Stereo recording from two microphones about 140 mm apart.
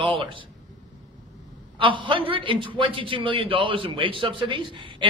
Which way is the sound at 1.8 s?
35° right (ahead or behind).